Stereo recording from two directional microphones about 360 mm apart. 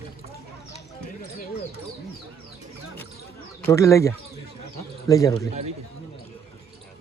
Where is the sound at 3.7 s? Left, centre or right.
Centre.